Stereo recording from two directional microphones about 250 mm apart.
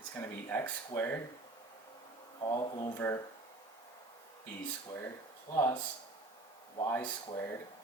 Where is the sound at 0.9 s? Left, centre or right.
Centre.